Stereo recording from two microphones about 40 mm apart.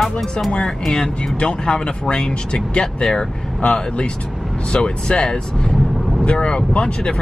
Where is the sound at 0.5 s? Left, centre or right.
Centre.